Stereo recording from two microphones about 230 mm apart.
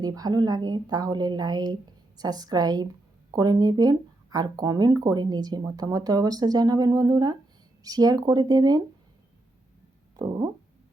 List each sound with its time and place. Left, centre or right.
0.0 s speech: centre
10.2 s speech: centre